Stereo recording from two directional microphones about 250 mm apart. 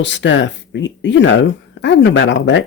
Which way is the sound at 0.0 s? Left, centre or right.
Left.